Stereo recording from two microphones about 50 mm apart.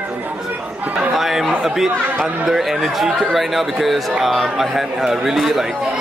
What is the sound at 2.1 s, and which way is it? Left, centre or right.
Speech, right.